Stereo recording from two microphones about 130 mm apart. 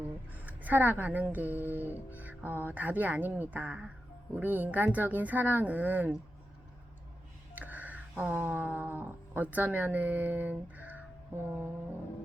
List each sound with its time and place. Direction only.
0.3 s speech: 15° right (ahead or behind)
7.5 s a sound: 10° right (ahead or behind)
11.4 s speech: 15° right (ahead or behind)